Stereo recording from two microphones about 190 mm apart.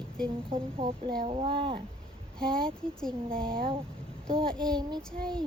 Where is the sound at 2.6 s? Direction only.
5° left (ahead or behind).